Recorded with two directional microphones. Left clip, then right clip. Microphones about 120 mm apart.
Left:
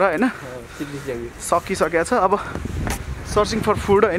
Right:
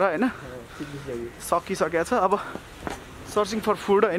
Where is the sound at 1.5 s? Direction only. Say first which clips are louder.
Left 5 dB; 5° right (ahead or behind).